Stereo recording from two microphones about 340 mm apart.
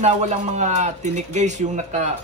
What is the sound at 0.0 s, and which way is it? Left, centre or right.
A man's voice, centre.